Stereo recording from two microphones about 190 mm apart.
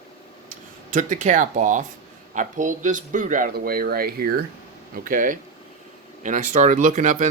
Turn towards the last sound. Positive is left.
turn(degrees=-40)  # may be behind; listen again after turning